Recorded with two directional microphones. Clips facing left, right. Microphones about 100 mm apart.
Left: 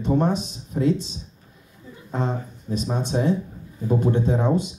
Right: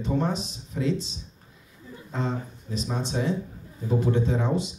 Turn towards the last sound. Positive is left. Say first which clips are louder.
# left 4 dB
turn(degrees=50)  # may be behind; listen again after turning